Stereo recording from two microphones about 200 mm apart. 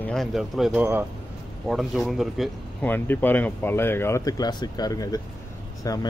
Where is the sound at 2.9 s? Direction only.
10° left (ahead or behind).